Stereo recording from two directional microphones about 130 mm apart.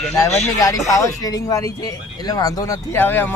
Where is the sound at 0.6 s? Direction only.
25° left (ahead or behind).